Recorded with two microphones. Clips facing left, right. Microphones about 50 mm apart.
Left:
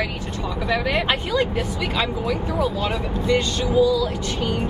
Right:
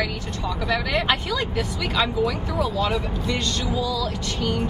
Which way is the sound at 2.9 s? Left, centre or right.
Centre.